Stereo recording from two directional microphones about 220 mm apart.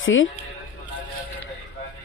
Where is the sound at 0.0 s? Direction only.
60° left (ahead or behind).